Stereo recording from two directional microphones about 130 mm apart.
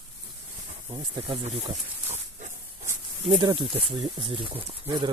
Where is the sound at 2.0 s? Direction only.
60° right (ahead or behind).